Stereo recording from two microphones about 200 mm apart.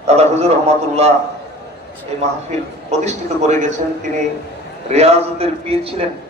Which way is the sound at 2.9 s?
35° right (ahead or behind).